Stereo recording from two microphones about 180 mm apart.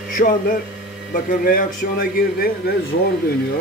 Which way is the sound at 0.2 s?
50° left (ahead or behind).